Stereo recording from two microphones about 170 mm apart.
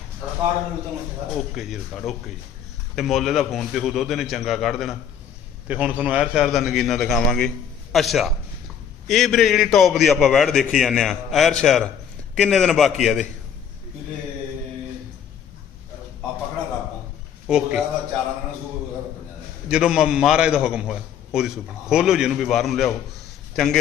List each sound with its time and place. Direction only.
1.5 s a man's voice: centre (ahead or behind)
17.5 s a man's voice: 5° right (ahead or behind)
19.6 s a man's voice: 5° right (ahead or behind)